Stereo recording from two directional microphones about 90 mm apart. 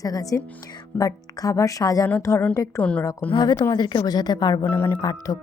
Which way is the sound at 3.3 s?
50° left (ahead or behind).